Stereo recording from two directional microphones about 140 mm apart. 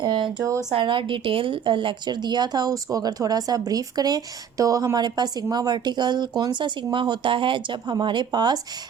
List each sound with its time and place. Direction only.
0.0 s a woman's voice: 30° right (ahead or behind)